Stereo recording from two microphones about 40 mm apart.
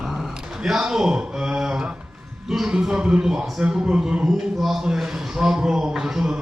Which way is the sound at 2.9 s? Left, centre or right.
Right.